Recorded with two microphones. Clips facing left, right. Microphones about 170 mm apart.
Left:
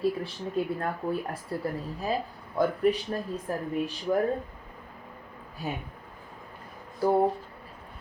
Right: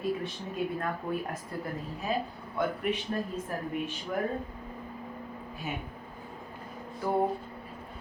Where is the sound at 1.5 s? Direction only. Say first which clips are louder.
Left 4 dB; 30° left (ahead or behind).